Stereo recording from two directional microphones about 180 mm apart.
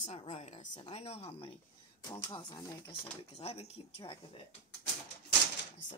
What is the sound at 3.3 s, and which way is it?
Speech, 35° left (ahead or behind).